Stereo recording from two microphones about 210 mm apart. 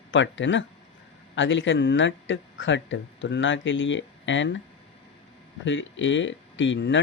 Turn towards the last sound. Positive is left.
turn(degrees=60)  # may be behind; listen again after turning